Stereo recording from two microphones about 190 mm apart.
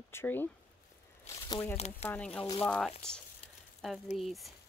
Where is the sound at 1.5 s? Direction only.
15° left (ahead or behind); by 4.5 s centre (ahead or behind).